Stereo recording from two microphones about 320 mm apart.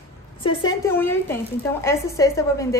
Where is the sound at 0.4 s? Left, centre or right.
Centre.